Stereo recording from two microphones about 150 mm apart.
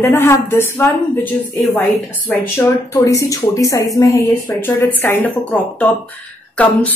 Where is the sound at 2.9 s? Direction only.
20° left (ahead or behind).